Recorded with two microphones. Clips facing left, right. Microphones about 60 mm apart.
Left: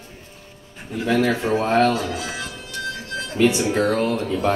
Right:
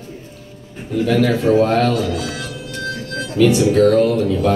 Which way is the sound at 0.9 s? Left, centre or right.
Left.